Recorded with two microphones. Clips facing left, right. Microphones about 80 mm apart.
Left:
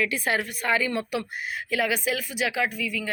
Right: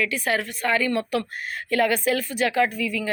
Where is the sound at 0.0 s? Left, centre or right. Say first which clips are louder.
Right 1 dB; left.